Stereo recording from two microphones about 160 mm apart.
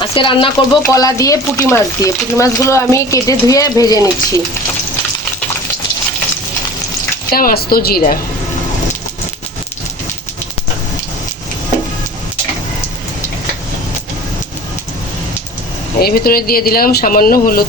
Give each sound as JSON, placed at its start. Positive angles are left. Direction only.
{"t": 0.0, "sound": "speech", "side_deg": 30}
{"t": 0.8, "sound": "speech", "side_deg": 20}
{"t": 7.3, "sound": "speech", "side_deg": 70}
{"t": 16.0, "sound": "speech", "side_deg": 70}